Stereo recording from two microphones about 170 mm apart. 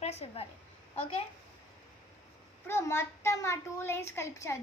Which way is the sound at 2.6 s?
15° left (ahead or behind).